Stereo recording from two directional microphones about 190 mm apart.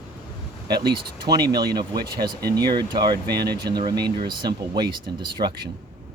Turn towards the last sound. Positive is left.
turn(degrees=-25)  # may be behind; listen again after turning